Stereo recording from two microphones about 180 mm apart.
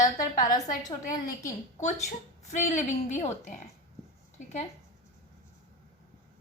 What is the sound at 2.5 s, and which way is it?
A woman's voice, 40° left (ahead or behind).